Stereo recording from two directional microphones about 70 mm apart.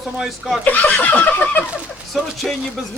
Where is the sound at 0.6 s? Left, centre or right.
Left.